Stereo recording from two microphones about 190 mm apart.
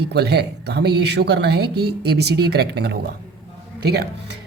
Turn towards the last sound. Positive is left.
turn(degrees=-60)  # may be behind; listen again after turning